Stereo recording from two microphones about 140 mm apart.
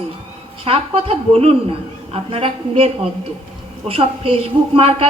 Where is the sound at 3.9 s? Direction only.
45° right (ahead or behind).